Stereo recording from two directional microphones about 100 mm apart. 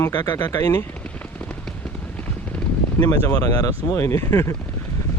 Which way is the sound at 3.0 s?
35° left (ahead or behind).